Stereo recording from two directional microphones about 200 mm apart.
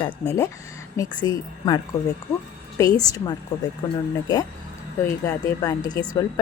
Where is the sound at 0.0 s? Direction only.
15° left (ahead or behind).